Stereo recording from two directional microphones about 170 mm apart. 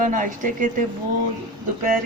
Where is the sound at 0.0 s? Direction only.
50° right (ahead or behind).